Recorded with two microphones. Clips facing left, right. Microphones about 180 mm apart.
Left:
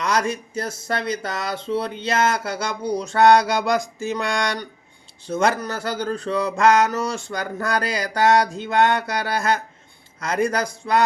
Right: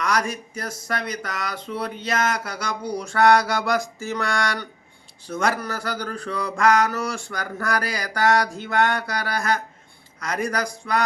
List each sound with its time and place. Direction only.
0.0 s speech: 25° left (ahead or behind)